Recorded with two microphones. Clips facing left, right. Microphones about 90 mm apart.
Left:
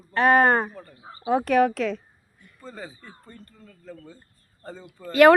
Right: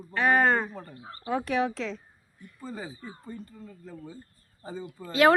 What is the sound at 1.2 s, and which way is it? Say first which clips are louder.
Speech: left 7 dB; 65° left (ahead or behind).